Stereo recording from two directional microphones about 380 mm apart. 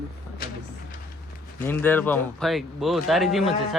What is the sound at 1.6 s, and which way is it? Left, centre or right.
Speech, centre.